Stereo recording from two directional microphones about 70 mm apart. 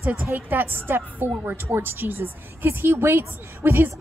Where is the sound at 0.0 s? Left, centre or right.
Right.